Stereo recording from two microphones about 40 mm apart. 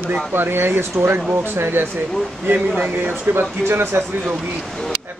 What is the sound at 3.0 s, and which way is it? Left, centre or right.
Speech, right.